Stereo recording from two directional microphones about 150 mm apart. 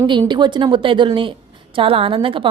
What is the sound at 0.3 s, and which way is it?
A woman's voice, 30° right (ahead or behind).